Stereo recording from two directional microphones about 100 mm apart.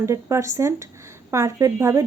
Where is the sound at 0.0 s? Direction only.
30° right (ahead or behind).